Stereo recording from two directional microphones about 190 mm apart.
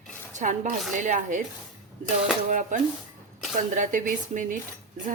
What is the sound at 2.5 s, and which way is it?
Speech, 40° right (ahead or behind).